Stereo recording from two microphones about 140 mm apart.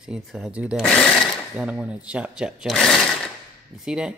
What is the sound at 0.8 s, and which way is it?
Speech, 5° left (ahead or behind).